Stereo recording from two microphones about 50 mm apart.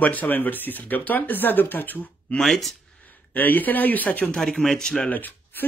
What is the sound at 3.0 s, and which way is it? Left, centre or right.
Speech, left.